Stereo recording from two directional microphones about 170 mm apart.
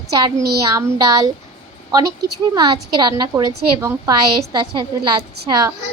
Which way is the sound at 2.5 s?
25° right (ahead or behind).